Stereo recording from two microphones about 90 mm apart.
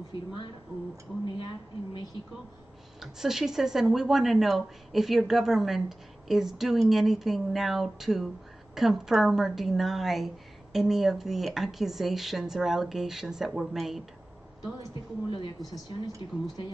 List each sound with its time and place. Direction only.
3.0 s speech: 5° right (ahead or behind)
14.8 s speech: 60° left (ahead or behind)
16.2 s speech: 70° left (ahead or behind)